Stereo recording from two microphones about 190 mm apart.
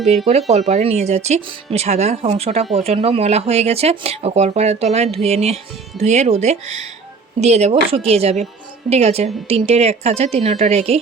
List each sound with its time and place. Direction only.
0.3 s speech: 35° right (ahead or behind)